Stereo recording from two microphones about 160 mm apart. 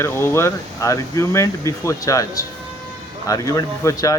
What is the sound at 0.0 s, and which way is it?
Speech, 15° left (ahead or behind).